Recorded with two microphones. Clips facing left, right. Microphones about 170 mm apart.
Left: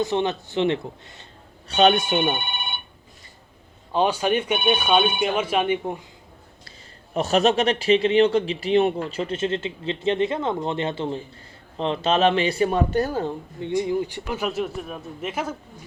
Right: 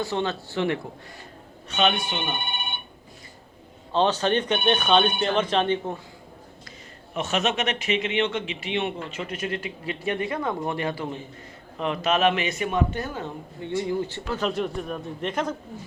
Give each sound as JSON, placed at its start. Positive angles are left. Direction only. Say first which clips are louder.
{"t": 0.0, "sound": "speech", "louder": "left 4 dB", "side_deg": 20}
{"t": 1.7, "sound": "speech", "louder": "left 6 dB", "side_deg": 40}
{"t": 3.9, "sound": "speech", "louder": "left 1 dB", "side_deg": 10}
{"t": 7.1, "sound": "a man's voice", "louder": "left 6 dB", "side_deg": 35}
{"t": 13.6, "sound": "speech", "louder": "left 3 dB", "side_deg": 15}